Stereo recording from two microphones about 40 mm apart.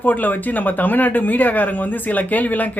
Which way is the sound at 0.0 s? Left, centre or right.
Left.